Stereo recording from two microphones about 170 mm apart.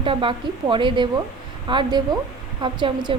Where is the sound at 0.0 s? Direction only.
30° right (ahead or behind).